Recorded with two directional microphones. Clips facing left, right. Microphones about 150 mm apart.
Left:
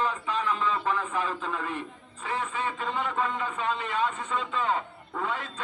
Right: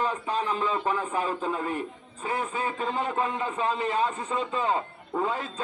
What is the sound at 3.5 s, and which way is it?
Speech, 35° right (ahead or behind).